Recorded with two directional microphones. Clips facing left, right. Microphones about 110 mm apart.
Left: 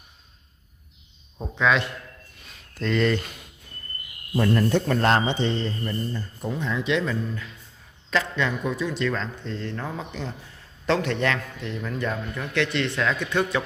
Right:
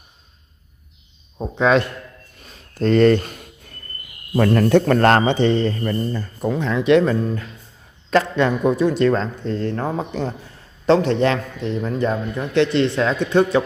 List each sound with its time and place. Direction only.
1.4 s a man's voice: 40° right (ahead or behind)
4.4 s a man's voice: 65° right (ahead or behind); by 10.3 s 45° right (ahead or behind)
10.9 s a man's voice: 30° right (ahead or behind)